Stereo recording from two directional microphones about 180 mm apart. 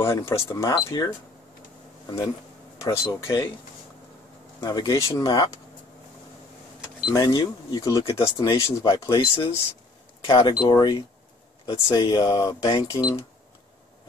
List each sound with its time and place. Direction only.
0.0 s speech: 15° left (ahead or behind)
4.6 s speech: 20° left (ahead or behind)
7.1 s speech: 20° left (ahead or behind)
8.0 s speech: 30° left (ahead or behind)